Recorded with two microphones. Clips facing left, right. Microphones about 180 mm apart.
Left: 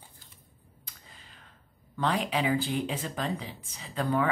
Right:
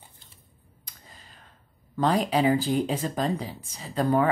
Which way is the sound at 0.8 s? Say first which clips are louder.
Right 3 dB; 40° right (ahead or behind).